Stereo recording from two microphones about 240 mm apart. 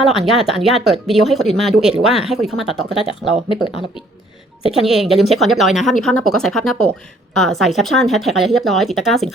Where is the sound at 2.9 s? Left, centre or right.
Left.